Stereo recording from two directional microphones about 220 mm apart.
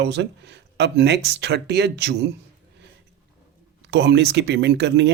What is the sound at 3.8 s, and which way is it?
A man's voice, 50° right (ahead or behind).